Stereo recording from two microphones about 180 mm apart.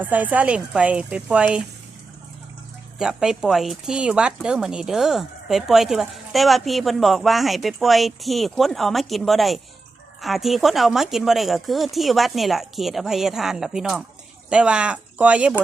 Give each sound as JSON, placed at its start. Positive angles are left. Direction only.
{"t": 0.0, "sound": "speech", "side_deg": -10}
{"t": 3.0, "sound": "speech", "side_deg": -5}